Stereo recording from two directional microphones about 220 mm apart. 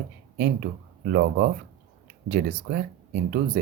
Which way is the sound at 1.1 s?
45° right (ahead or behind).